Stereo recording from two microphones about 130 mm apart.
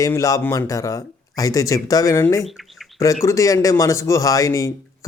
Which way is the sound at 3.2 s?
25° left (ahead or behind).